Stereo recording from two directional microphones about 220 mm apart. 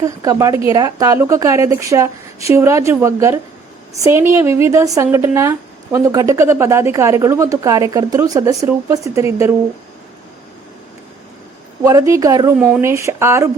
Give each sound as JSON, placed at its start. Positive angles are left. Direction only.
{"t": 0.0, "sound": "speech", "side_deg": -15}
{"t": 11.8, "sound": "speech", "side_deg": -15}
{"t": 12.5, "sound": "speech", "side_deg": -5}